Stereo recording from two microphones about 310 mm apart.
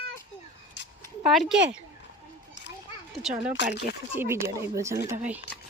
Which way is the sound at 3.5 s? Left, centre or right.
Left.